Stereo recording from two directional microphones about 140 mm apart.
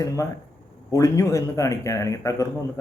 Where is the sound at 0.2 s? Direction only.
20° left (ahead or behind).